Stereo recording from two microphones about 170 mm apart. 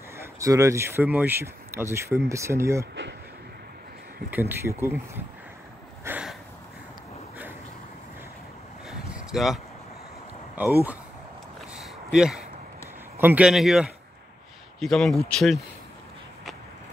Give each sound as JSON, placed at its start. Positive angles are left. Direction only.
{"t": 0.2, "sound": "speech", "side_deg": -20}
{"t": 4.3, "sound": "speech", "side_deg": -15}
{"t": 6.0, "sound": "a sound", "side_deg": -10}
{"t": 8.8, "sound": "vehicle", "side_deg": -5}
{"t": 10.6, "sound": "speech", "side_deg": -10}
{"t": 11.7, "sound": "a sound", "side_deg": -5}
{"t": 13.2, "sound": "speech", "side_deg": -10}